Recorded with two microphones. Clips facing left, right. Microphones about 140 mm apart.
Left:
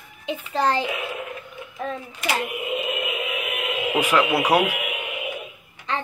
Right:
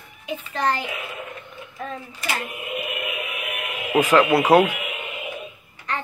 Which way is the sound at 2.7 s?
25° left (ahead or behind).